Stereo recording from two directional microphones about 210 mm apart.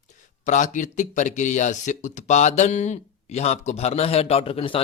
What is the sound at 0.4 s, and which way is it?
Speech, 35° left (ahead or behind).